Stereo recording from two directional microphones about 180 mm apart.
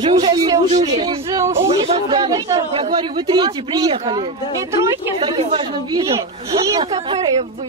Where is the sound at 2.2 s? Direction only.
20° right (ahead or behind).